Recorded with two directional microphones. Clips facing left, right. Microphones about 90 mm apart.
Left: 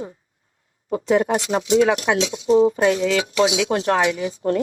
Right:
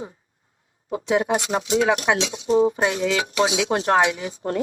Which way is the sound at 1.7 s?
35° right (ahead or behind).